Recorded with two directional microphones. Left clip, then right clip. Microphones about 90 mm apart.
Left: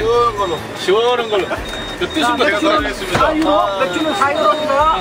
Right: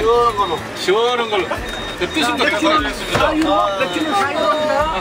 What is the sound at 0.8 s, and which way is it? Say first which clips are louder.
Speech: left 2 dB; 25° right (ahead or behind).